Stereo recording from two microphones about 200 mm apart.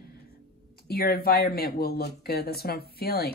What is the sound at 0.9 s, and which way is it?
Speech, 50° left (ahead or behind).